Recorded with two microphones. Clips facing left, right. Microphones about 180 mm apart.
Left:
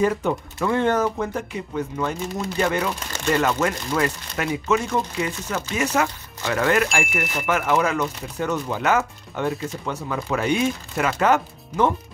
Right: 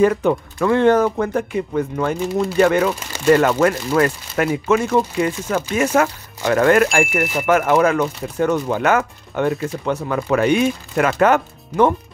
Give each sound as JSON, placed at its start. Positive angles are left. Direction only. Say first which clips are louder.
{"t": 0.0, "sound": "speech", "louder": "right 6 dB", "side_deg": -70}